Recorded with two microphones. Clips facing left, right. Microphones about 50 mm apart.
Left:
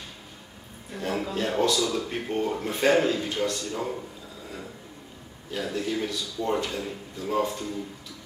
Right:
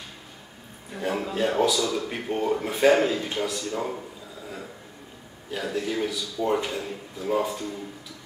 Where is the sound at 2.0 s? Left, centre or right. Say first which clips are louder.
Right 2 dB; centre.